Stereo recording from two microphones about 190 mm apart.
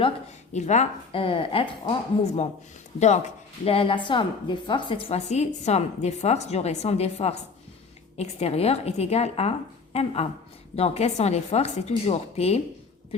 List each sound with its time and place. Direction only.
0.5 s a woman's voice: 40° left (ahead or behind)